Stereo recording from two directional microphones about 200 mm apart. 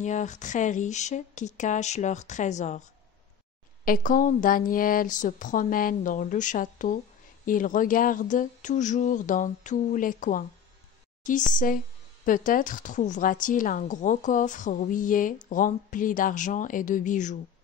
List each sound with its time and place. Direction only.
0.0 s a woman's voice: 35° left (ahead or behind)
3.8 s a woman's voice: 45° left (ahead or behind)
11.5 s a woman's voice: 45° left (ahead or behind)